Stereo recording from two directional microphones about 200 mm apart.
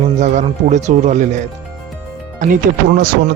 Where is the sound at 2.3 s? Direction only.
40° right (ahead or behind).